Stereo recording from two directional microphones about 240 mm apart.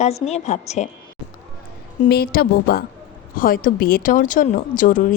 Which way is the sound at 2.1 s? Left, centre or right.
Left.